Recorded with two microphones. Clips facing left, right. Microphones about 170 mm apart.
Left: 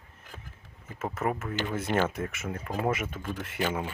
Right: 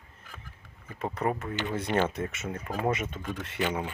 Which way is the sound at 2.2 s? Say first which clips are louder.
Right 1 dB; 25° right (ahead or behind).